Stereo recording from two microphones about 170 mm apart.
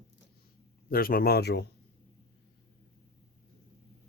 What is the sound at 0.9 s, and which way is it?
Speech, 60° left (ahead or behind).